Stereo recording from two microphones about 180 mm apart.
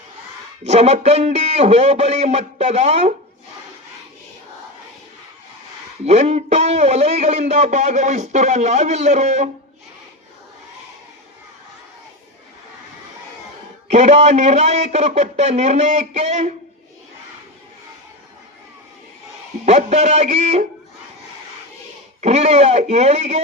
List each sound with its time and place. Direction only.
0.6 s a man's voice: 35° right (ahead or behind)
6.1 s a man's voice: 40° right (ahead or behind)
13.9 s a man's voice: 40° right (ahead or behind)
19.6 s a man's voice: 35° right (ahead or behind)
22.2 s a man's voice: 35° right (ahead or behind)